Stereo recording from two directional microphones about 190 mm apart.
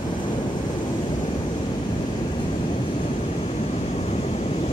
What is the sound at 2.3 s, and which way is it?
Vehicle, 25° left (ahead or behind).